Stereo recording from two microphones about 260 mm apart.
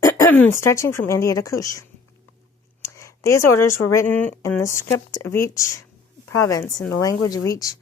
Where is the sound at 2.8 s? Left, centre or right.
Centre.